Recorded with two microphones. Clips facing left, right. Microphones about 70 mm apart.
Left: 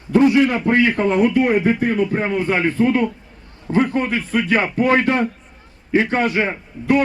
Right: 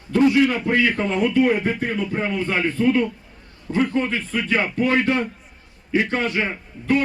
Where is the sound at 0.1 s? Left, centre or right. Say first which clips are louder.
Left 3 dB; left.